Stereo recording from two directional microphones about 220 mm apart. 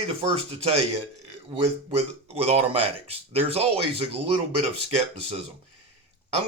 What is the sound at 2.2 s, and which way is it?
Speech, 25° right (ahead or behind).